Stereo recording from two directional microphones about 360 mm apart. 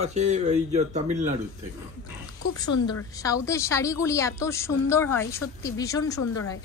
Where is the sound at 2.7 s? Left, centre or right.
Left.